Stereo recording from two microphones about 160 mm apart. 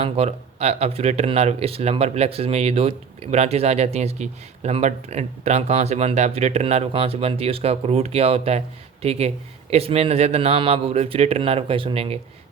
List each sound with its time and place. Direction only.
0.0 s speech: 40° right (ahead or behind)